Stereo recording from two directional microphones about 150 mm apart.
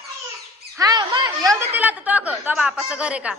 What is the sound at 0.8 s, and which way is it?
Squawk, 30° right (ahead or behind).